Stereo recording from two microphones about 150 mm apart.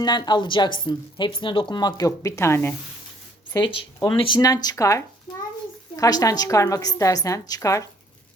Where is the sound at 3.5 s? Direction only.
30° left (ahead or behind).